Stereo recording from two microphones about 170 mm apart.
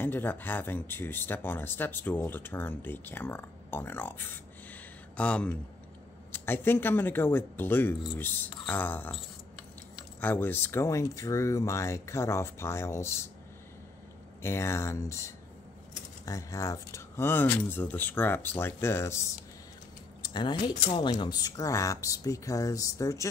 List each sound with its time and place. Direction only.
0.0 s speech: 10° left (ahead or behind)
10.2 s speech: 10° left (ahead or behind)
14.4 s speech: 15° left (ahead or behind)
20.6 s speech: 30° left (ahead or behind)